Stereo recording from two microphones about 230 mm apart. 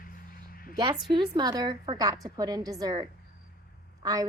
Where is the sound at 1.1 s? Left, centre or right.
Centre.